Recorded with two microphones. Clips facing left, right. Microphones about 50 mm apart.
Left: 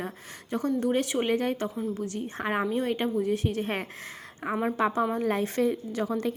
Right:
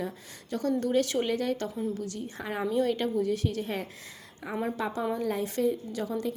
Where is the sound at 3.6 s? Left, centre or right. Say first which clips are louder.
Left 2 dB; left.